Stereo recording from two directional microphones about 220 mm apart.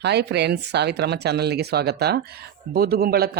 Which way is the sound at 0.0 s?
50° right (ahead or behind).